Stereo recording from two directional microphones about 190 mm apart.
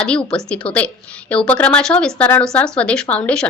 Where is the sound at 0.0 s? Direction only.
5° left (ahead or behind).